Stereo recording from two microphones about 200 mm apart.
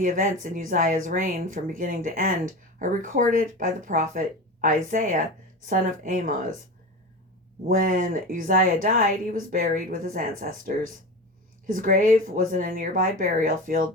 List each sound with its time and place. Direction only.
0.0 s speech: 45° right (ahead or behind)
7.7 s speech: 45° right (ahead or behind)
11.6 s speech: 45° right (ahead or behind)